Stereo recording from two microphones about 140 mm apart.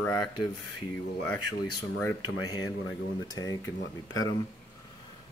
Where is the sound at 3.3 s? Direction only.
25° left (ahead or behind).